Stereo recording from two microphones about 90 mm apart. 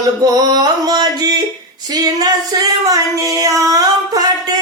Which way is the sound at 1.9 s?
45° right (ahead or behind).